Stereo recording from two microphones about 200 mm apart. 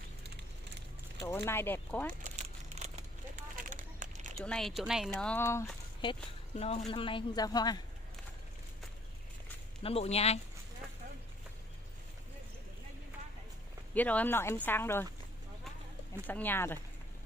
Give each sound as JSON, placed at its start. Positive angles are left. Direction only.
{"t": 1.2, "sound": "speech", "side_deg": 15}
{"t": 2.2, "sound": "crumpling", "side_deg": -35}
{"t": 3.5, "sound": "a sound", "side_deg": -40}
{"t": 4.4, "sound": "speech", "side_deg": 0}
{"t": 5.9, "sound": "a sound", "side_deg": 25}
{"t": 6.9, "sound": "a woman's voice", "side_deg": 25}
{"t": 9.8, "sound": "speech", "side_deg": 30}
{"t": 13.9, "sound": "speech", "side_deg": 10}
{"t": 16.3, "sound": "speech", "side_deg": 10}